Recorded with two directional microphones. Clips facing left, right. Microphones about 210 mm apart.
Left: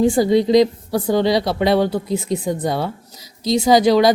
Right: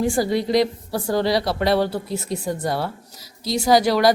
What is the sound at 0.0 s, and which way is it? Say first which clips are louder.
Speech: left 6 dB; 20° left (ahead or behind).